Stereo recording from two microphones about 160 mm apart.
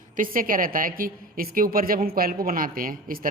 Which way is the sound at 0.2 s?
60° right (ahead or behind).